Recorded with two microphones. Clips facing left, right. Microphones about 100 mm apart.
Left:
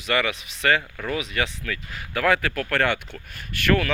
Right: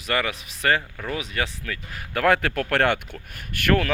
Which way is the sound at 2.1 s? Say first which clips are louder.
Right 2 dB; 50° right (ahead or behind).